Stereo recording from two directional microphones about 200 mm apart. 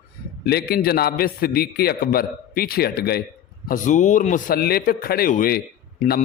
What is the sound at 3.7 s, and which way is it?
A man's voice, 40° left (ahead or behind).